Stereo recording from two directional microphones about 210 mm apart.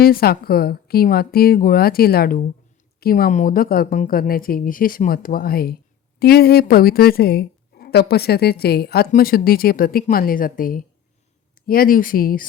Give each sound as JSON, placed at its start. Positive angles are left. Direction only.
{"t": 0.0, "sound": "speech", "side_deg": 45}